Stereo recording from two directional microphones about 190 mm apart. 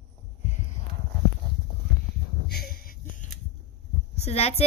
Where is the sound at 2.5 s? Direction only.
55° left (ahead or behind).